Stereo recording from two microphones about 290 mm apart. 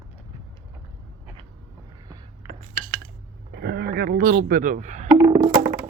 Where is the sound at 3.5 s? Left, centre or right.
Right.